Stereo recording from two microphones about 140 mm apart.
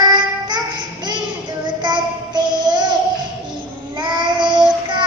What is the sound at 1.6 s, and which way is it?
Child singing, 30° right (ahead or behind).